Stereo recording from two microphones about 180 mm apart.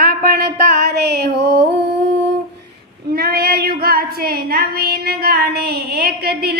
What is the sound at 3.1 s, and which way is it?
Female singing, 55° right (ahead or behind).